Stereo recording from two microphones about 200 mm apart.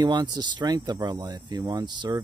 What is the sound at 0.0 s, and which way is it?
Speech, 20° right (ahead or behind).